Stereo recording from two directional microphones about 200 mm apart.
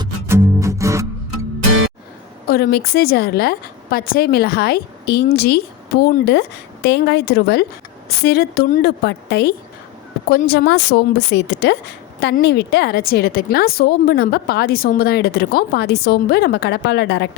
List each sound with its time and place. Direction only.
0.0 s music: 15° right (ahead or behind)
2.5 s a woman's voice: 50° left (ahead or behind)